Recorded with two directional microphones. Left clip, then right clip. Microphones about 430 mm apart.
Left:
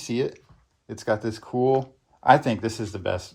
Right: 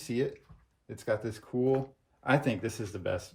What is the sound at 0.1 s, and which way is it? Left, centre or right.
Speech, centre.